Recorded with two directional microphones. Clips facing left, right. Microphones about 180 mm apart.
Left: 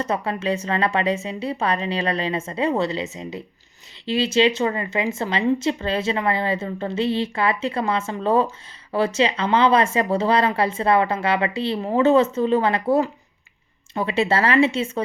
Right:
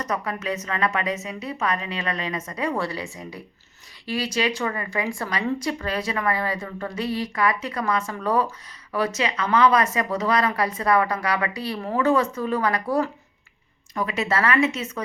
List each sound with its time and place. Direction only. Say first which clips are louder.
0.0 s speech: left 4 dB; 30° left (ahead or behind)